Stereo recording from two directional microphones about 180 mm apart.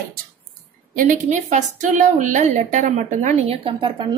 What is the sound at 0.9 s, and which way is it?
A woman's voice, 45° right (ahead or behind).